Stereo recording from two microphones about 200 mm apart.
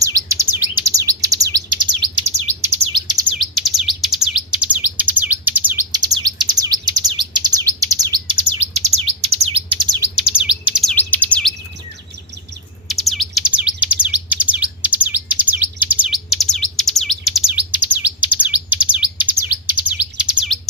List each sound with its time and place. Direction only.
0.0 s chirp: 15° right (ahead or behind)
3.3 s chirp: centre (ahead or behind); by 8.4 s 20° right (ahead or behind)
8.7 s chirp: 30° right (ahead or behind)
10.7 s bird: centre (ahead or behind)
12.9 s bird: centre (ahead or behind)
14.5 s chirp: 5° right (ahead or behind)